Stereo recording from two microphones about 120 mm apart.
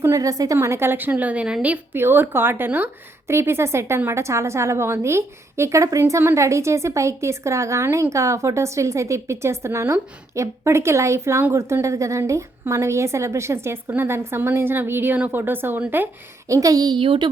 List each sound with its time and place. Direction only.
0.0 s a woman's voice: 30° right (ahead or behind)
16.5 s a woman's voice: 30° right (ahead or behind)